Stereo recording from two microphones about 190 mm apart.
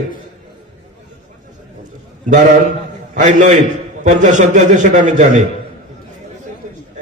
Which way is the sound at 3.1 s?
40° right (ahead or behind).